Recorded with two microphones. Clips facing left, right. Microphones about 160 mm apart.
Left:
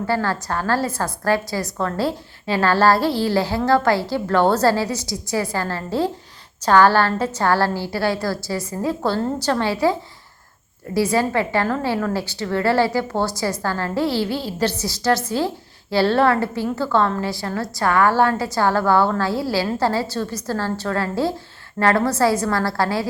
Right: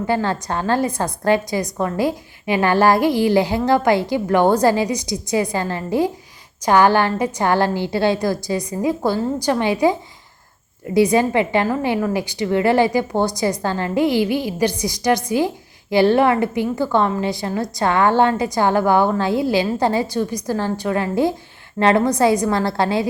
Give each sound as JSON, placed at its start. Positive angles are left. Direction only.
{"t": 0.1, "sound": "a woman's voice", "side_deg": -20}